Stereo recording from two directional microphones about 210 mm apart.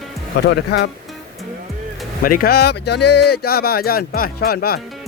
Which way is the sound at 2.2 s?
45° left (ahead or behind).